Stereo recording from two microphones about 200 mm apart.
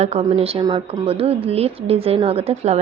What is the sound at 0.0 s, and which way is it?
A woman's voice, 30° right (ahead or behind).